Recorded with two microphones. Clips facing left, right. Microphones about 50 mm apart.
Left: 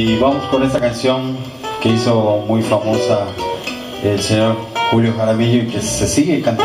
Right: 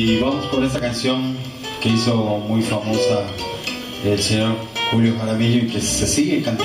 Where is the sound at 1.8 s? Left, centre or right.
Left.